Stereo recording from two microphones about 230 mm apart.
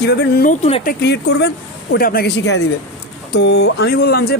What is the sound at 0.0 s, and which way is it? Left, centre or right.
Speech, left.